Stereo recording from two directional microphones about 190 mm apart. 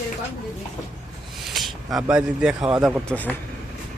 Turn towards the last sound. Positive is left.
turn(degrees=10)  # may be behind; listen again after turning